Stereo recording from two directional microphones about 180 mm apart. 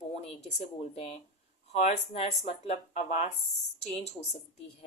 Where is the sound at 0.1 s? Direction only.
35° left (ahead or behind).